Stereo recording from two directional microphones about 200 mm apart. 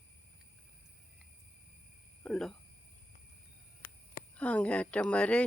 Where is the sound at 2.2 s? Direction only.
5° left (ahead or behind).